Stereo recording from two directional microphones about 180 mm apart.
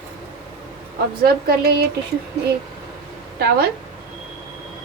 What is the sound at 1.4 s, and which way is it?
Speech, 60° right (ahead or behind).